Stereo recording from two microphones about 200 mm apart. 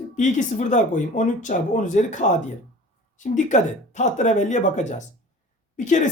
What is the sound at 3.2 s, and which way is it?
Speech, 40° left (ahead or behind).